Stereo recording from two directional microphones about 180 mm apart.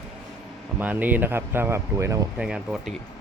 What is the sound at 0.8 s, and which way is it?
Speech, 10° right (ahead or behind).